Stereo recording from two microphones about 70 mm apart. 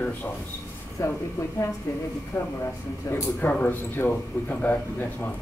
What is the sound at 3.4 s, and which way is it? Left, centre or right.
A man's voice, left.